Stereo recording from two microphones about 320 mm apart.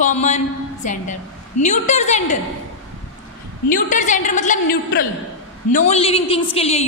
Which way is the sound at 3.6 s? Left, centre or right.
Left.